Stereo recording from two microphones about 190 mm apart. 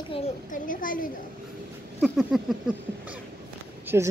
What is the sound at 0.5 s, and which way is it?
Speech, 45° left (ahead or behind).